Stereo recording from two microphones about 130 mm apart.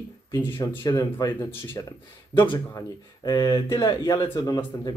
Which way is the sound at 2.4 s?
15° left (ahead or behind).